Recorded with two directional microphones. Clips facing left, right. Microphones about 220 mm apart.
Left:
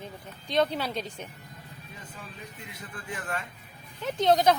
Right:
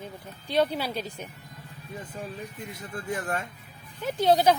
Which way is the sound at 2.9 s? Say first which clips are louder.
Right 5 dB; 40° right (ahead or behind).